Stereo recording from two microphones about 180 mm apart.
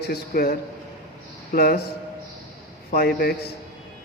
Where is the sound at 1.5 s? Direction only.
60° left (ahead or behind).